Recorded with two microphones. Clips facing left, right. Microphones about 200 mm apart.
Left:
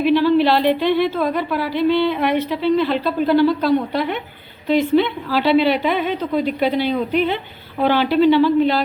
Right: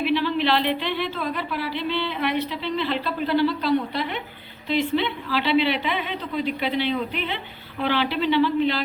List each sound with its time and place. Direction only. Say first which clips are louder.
0.0 s speech: left 8 dB; 40° left (ahead or behind)